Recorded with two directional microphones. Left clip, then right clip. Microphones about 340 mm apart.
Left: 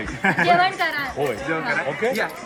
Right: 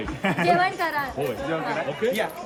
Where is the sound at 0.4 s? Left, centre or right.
Right.